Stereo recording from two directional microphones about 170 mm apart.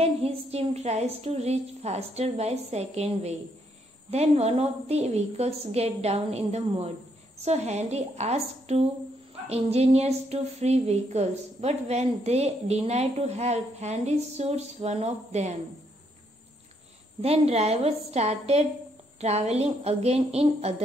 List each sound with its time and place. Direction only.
0.0 s a woman's voice: 35° right (ahead or behind)
17.2 s a woman's voice: 40° right (ahead or behind)